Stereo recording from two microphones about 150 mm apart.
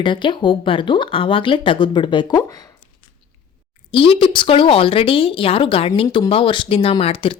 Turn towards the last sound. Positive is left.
turn(degrees=40)  # may be behind; listen again after turning